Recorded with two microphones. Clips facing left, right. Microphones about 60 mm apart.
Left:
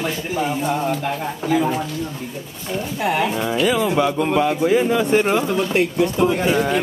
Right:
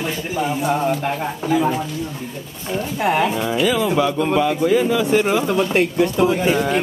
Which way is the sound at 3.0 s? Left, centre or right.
Right.